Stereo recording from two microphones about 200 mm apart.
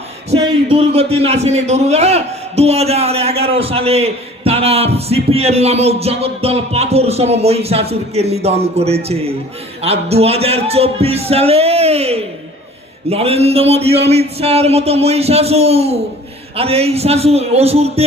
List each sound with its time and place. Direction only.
0.3 s a man's voice: 30° right (ahead or behind)